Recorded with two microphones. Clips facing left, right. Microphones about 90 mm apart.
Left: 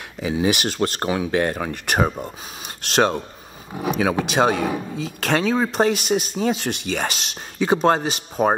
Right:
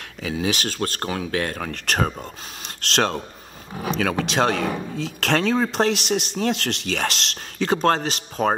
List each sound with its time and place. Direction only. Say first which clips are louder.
0.4 s speech: left 4 dB; 15° left (ahead or behind)